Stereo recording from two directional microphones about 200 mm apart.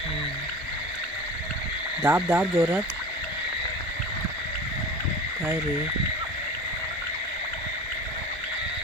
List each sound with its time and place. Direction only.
2.0 s speech: 5° right (ahead or behind)